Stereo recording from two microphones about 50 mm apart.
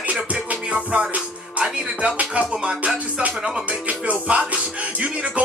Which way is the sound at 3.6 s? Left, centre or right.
Right.